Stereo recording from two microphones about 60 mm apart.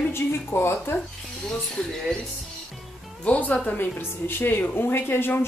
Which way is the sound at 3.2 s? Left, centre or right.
Left.